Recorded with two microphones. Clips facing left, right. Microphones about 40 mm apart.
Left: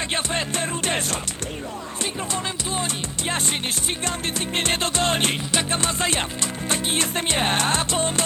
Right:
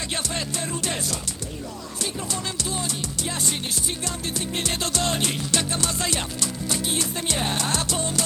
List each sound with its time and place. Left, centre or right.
0.1 s music: left
3.2 s music: left